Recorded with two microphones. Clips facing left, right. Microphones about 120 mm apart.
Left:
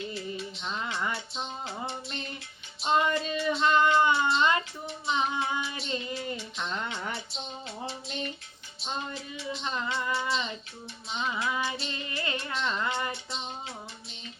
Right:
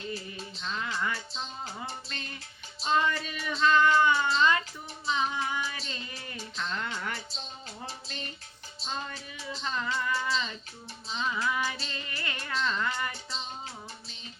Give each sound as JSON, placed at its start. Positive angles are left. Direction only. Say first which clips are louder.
{"t": 0.6, "sound": "music", "louder": "right 1 dB", "side_deg": 25}
{"t": 2.8, "sound": "child singing", "louder": "left 2 dB", "side_deg": 25}
{"t": 6.6, "sound": "a sound", "louder": "right 2 dB", "side_deg": 20}
{"t": 9.6, "sound": "music", "louder": "right 1 dB", "side_deg": 20}